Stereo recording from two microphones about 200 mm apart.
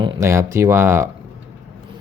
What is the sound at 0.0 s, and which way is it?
Speech, 15° right (ahead or behind).